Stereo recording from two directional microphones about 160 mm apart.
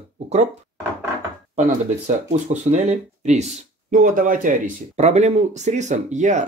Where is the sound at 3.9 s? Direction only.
60° right (ahead or behind).